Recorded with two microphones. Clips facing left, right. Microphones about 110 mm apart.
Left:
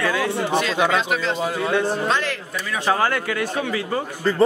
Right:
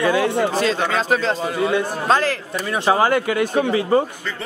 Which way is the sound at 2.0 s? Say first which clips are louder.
Right 5 dB; 40° right (ahead or behind).